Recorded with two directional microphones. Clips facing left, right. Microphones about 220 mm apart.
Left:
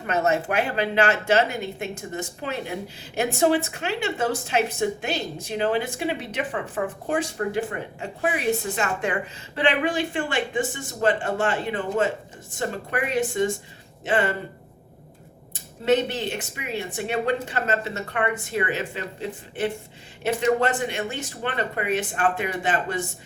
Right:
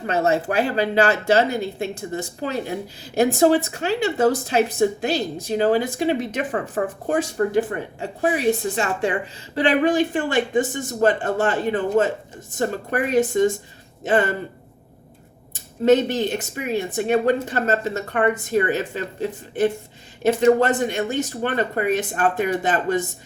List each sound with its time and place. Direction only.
0.0 s speech: 30° right (ahead or behind)
15.8 s speech: 40° right (ahead or behind)
20.2 s speech: 40° right (ahead or behind)